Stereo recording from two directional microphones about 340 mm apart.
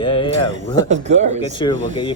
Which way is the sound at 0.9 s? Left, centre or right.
Centre.